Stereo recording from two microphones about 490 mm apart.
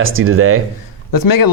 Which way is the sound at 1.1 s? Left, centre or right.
Left.